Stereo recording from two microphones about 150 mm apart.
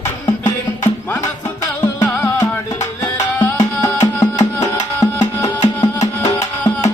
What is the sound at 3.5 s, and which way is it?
Music, 25° left (ahead or behind).